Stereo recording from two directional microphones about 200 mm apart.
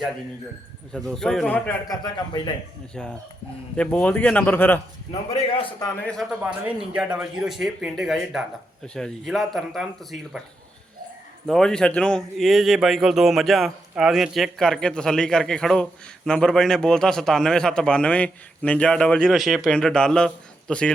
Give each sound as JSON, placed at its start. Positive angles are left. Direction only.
{"t": 0.9, "sound": "speech", "side_deg": 0}
{"t": 1.9, "sound": "a man's voice", "side_deg": 20}
{"t": 3.0, "sound": "speech", "side_deg": 5}
{"t": 5.1, "sound": "a man's voice", "side_deg": 30}
{"t": 6.0, "sound": "speech", "side_deg": 5}
{"t": 11.4, "sound": "speech", "side_deg": 5}